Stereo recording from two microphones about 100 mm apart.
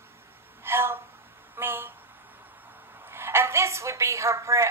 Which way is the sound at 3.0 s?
25° right (ahead or behind).